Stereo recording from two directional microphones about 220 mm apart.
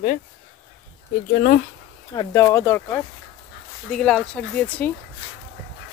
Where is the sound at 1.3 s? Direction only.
40° left (ahead or behind).